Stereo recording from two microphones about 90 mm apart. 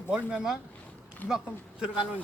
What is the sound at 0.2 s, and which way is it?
Speech, 10° right (ahead or behind).